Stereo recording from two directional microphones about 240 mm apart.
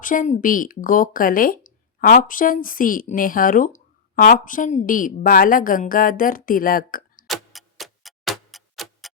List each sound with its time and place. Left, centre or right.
0.0 s a woman's voice: left
7.3 s tick-tock: centre